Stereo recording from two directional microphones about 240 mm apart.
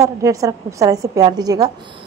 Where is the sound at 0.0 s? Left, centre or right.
Centre.